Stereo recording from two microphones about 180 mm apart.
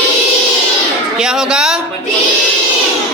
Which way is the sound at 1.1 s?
5° right (ahead or behind).